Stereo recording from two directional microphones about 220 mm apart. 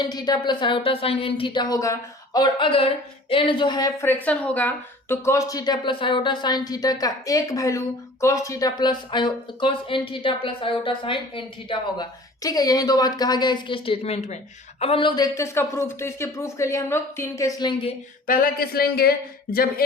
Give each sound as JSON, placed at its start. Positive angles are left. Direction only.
{"t": 0.0, "sound": "speech", "side_deg": 20}
{"t": 18.3, "sound": "speech", "side_deg": 40}